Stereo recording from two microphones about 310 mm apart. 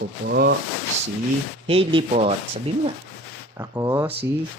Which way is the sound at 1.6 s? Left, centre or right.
Centre.